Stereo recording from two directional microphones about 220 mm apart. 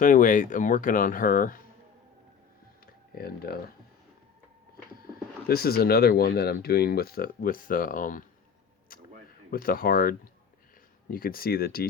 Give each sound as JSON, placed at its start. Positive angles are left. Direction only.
{"t": 0.0, "sound": "speech", "side_deg": 35}
{"t": 2.8, "sound": "a sound", "side_deg": 45}
{"t": 5.5, "sound": "speech", "side_deg": 45}
{"t": 9.5, "sound": "speech", "side_deg": 40}